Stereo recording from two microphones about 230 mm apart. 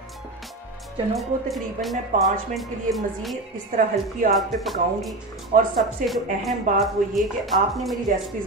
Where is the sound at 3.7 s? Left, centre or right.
Right.